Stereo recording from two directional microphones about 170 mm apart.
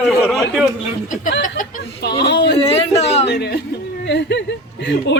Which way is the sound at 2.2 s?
80° left.